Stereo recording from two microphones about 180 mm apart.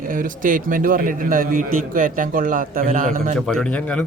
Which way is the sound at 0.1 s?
50° right (ahead or behind).